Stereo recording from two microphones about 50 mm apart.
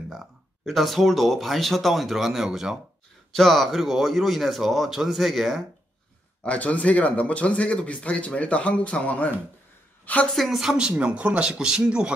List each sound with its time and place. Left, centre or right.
0.1 s speech: centre
6.4 s speech: left
10.3 s speech: centre
10.6 s speech: centre